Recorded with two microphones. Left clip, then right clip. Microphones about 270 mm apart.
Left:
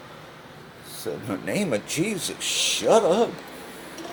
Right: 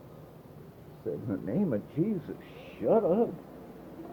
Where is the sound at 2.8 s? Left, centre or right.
Left.